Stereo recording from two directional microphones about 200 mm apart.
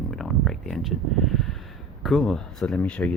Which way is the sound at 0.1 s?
Centre (ahead or behind).